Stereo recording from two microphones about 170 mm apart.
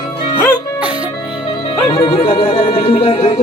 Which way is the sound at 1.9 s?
35° left (ahead or behind).